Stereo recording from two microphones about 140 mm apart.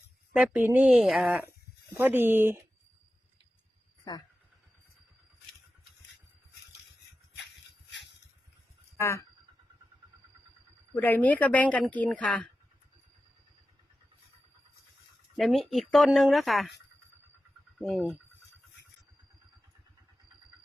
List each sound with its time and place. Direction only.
0.3 s speech: 10° right (ahead or behind)
9.0 s speech: 20° left (ahead or behind)
10.9 s a woman's voice: 15° left (ahead or behind)
15.4 s speech: centre (ahead or behind)
17.7 s speech: centre (ahead or behind)